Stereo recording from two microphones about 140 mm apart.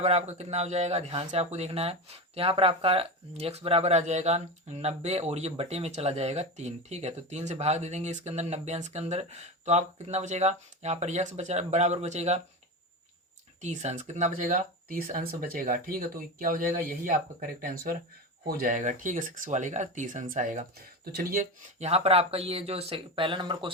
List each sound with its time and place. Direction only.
0.0 s speech: 50° right (ahead or behind)
13.6 s speech: 55° right (ahead or behind); by 17.9 s 85° right
18.4 s speech: 70° right (ahead or behind); by 21.4 s 90° right
21.8 s speech: 50° right (ahead or behind)